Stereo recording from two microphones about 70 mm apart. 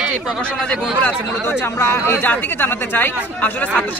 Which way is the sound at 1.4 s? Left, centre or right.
Left.